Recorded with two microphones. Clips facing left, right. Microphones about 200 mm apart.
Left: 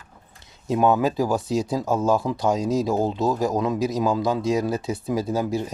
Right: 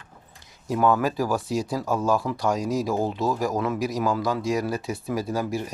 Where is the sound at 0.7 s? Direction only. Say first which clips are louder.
Left 2 dB; 20° left (ahead or behind).